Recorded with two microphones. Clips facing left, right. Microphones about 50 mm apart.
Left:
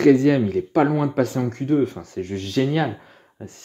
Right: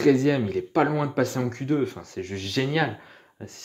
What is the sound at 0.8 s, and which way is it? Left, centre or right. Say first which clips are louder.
Speech: left 3 dB; centre.